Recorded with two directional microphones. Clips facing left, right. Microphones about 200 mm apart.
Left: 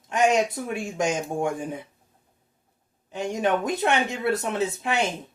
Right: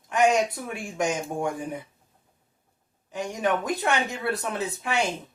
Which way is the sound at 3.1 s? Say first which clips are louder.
Left 2 dB; 25° left (ahead or behind).